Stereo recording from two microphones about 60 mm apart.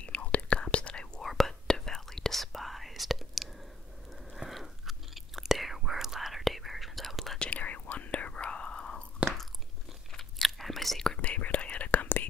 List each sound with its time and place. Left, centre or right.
0.0 s whispering: left
1.2 s whispering: centre
4.3 s chewing: centre
7.3 s whispering: left
9.2 s biting: right
10.1 s biting: centre
11.1 s whispering: left